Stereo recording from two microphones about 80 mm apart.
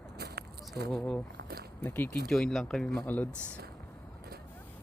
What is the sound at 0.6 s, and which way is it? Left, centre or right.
Speech, centre.